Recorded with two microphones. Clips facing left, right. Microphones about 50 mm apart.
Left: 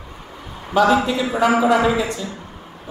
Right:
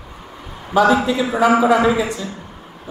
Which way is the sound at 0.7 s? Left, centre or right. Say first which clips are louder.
Right 1 dB; centre.